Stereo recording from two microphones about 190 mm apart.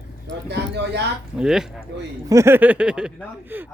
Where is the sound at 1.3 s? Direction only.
5° right (ahead or behind).